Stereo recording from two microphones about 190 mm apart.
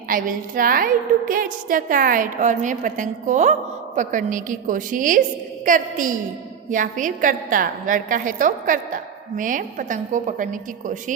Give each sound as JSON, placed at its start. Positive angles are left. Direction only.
{"t": 0.1, "sound": "a woman's voice", "side_deg": -45}